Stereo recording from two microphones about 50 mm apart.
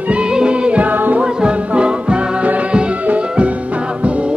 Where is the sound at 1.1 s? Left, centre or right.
Centre.